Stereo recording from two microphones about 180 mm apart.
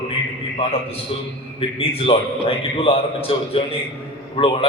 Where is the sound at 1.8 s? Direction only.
30° left (ahead or behind).